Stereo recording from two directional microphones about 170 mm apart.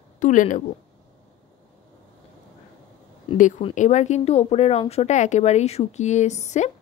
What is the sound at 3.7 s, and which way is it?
A woman's voice, 45° left (ahead or behind).